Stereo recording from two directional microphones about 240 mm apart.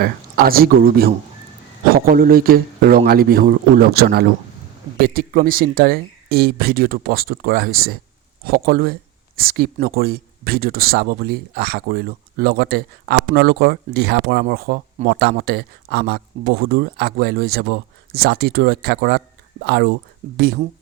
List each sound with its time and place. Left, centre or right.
0.0 s speech: right